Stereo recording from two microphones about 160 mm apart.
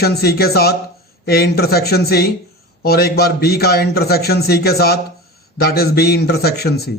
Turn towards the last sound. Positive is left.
turn(degrees=90)